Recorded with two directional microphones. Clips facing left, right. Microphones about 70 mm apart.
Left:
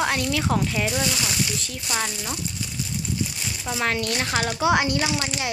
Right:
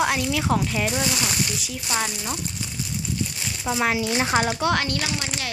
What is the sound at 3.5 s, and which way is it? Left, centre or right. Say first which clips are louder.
Speech: right 3 dB; centre.